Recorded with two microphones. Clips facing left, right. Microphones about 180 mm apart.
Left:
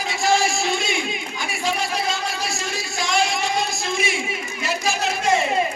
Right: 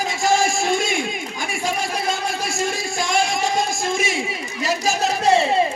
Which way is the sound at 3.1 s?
50° right (ahead or behind).